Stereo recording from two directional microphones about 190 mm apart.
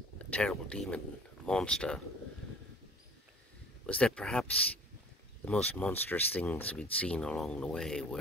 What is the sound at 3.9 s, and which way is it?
Speech, 5° left (ahead or behind).